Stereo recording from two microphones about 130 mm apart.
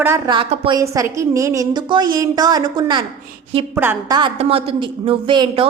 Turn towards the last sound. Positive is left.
turn(degrees=-40)  # may be behind; listen again after turning